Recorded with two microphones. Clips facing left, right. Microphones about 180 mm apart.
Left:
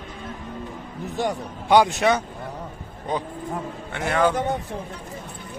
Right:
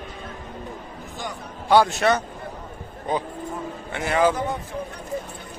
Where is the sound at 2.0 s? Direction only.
10° left (ahead or behind).